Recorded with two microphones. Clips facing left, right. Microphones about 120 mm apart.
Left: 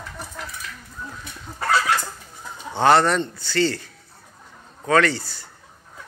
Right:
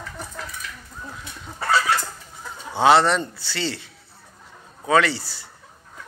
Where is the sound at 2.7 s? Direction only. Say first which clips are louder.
Even; 5° right (ahead or behind).